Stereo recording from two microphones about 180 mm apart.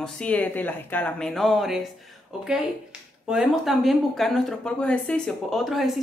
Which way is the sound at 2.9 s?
5° right (ahead or behind).